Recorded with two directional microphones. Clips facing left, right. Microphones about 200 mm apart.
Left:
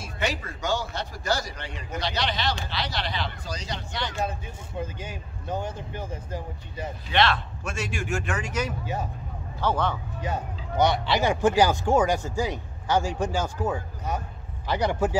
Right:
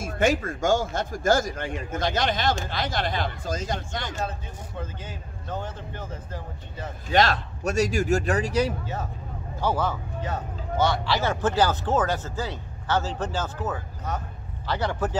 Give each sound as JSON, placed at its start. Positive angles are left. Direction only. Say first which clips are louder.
{"t": 0.0, "sound": "speech", "louder": "right 7 dB", "side_deg": -50}
{"t": 4.2, "sound": "speech", "louder": "left 1 dB", "side_deg": 10}
{"t": 7.1, "sound": "speech", "louder": "right 2 dB", "side_deg": -40}
{"t": 9.6, "sound": "a man's voice", "louder": "even", "side_deg": -10}
{"t": 10.2, "sound": "speech", "louder": "left 2 dB", "side_deg": 15}